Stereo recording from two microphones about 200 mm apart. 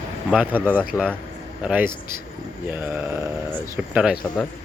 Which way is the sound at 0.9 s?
10° left (ahead or behind).